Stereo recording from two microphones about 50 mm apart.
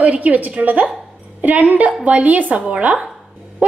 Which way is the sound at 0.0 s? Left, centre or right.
Right.